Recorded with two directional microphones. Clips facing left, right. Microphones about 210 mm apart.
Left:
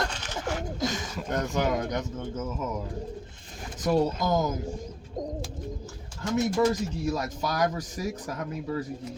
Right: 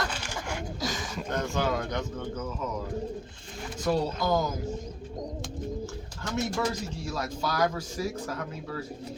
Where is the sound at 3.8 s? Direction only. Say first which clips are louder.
Left 3 dB; 20° left (ahead or behind).